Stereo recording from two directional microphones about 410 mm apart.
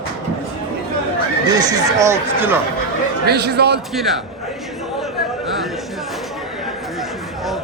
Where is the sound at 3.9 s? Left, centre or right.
Centre.